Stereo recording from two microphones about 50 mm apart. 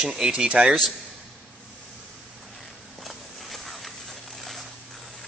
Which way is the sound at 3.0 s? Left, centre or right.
Centre.